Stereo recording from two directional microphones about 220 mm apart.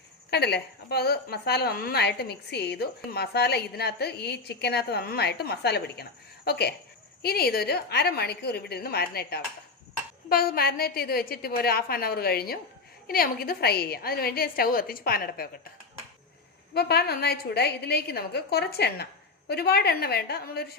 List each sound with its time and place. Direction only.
0.3 s a woman's voice: 50° left (ahead or behind)
16.7 s a woman's voice: 45° left (ahead or behind)